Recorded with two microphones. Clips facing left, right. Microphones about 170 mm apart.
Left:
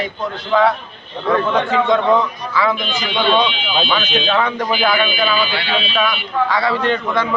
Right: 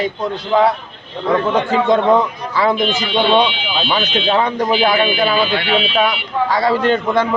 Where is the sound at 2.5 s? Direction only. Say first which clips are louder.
Right 2 dB; 45° right (ahead or behind).